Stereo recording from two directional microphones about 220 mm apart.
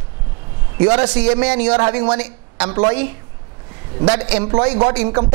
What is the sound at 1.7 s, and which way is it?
Speech, 25° right (ahead or behind).